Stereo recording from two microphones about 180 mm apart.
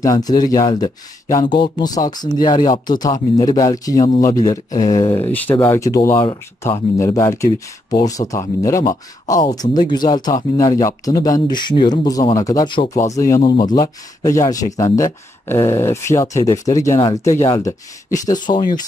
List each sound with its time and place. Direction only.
0.0 s speech: 20° left (ahead or behind)